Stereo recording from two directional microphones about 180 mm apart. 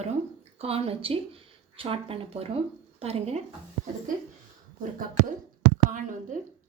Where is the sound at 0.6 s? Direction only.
35° right (ahead or behind).